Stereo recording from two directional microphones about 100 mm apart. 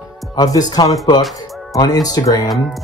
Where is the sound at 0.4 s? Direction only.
40° left (ahead or behind).